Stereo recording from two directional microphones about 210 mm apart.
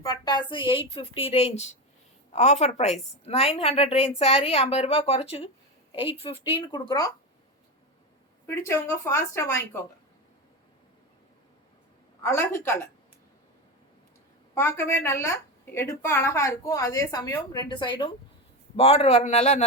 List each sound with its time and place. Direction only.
0.0 s a woman's voice: 20° left (ahead or behind)
8.4 s a woman's voice: 15° left (ahead or behind)
12.2 s a woman's voice: 10° left (ahead or behind)
14.5 s a woman's voice: 10° left (ahead or behind); by 19.6 s 30° left (ahead or behind)